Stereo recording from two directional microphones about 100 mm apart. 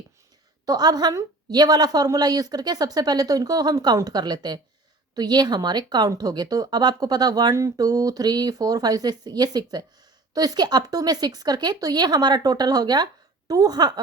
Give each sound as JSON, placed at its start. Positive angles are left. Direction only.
{"t": 0.6, "sound": "a woman's voice", "side_deg": -40}